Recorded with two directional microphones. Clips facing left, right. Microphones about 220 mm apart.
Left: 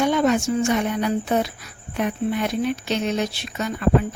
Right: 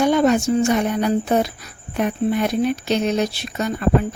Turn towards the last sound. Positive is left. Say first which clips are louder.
# right 3 dB
turn(degrees=-40)  # may be behind; listen again after turning